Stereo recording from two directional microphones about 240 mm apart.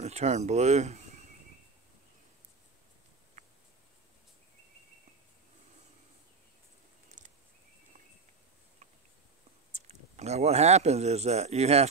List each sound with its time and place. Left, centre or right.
0.0 s speech: right
9.8 s speech: right